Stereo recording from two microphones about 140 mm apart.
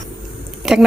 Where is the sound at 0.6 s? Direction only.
5° right (ahead or behind).